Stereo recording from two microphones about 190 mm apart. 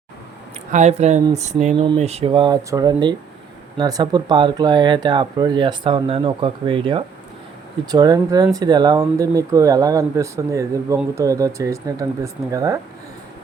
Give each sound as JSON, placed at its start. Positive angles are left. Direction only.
{"t": 0.7, "sound": "speech", "side_deg": -35}